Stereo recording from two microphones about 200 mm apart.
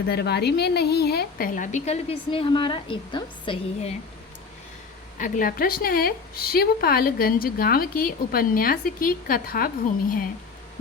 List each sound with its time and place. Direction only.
0.1 s a woman's voice: 55° left (ahead or behind); by 3.9 s 25° left (ahead or behind)
5.1 s a woman's voice: 40° left (ahead or behind)